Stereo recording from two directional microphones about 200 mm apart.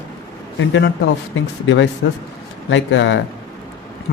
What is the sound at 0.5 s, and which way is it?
Speech, 70° left (ahead or behind).